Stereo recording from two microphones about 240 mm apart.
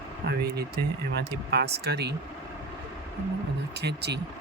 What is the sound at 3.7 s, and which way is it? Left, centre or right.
Speech, right.